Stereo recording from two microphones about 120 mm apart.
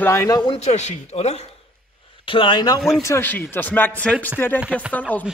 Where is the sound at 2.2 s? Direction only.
45° left (ahead or behind).